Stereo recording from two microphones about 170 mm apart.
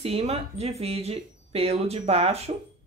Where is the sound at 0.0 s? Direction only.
35° right (ahead or behind).